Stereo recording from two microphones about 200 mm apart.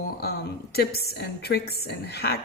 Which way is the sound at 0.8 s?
50° left (ahead or behind).